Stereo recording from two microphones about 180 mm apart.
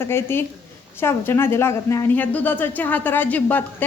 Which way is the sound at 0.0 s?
15° left (ahead or behind).